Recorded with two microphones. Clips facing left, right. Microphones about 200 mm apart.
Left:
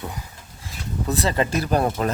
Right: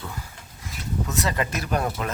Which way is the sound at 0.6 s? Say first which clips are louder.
Left 1 dB; 30° left (ahead or behind).